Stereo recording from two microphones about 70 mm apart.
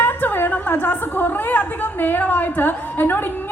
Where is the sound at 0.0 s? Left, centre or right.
Left.